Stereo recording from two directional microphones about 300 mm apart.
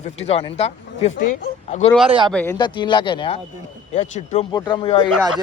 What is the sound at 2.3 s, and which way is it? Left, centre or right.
A man's voice, centre.